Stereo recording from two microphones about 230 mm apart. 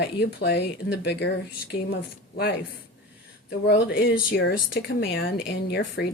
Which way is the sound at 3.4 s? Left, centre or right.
Left.